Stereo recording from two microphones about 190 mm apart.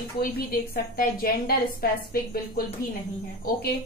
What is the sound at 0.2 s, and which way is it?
A woman's voice, 50° left (ahead or behind).